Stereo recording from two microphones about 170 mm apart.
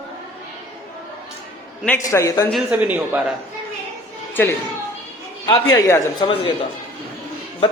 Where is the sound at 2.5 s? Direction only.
10° right (ahead or behind).